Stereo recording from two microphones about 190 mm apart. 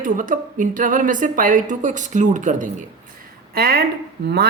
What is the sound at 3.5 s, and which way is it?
Speech, 55° right (ahead or behind).